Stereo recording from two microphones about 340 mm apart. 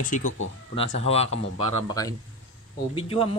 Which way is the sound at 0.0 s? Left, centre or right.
Left.